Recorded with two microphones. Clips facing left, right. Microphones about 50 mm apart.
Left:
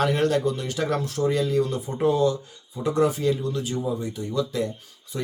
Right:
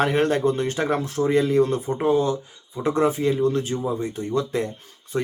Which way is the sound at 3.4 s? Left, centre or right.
Right.